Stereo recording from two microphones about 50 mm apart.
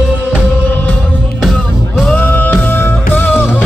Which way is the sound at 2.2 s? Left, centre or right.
Left.